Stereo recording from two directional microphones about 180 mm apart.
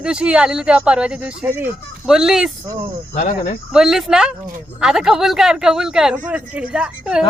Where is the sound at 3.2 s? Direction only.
55° left (ahead or behind).